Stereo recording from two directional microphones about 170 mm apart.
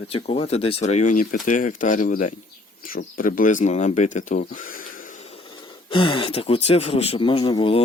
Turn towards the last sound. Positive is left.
turn(degrees=30)  # may be behind; listen again after turning